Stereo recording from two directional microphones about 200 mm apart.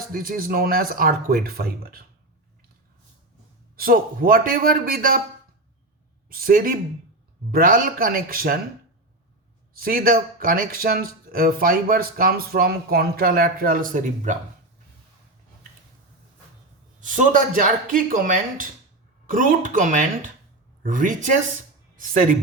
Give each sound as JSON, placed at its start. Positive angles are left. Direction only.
{"t": 0.1, "sound": "a man's voice", "side_deg": -45}
{"t": 3.8, "sound": "a man's voice", "side_deg": -45}
{"t": 6.2, "sound": "a man's voice", "side_deg": -45}
{"t": 9.7, "sound": "a man's voice", "side_deg": -45}
{"t": 17.0, "sound": "a man's voice", "side_deg": -40}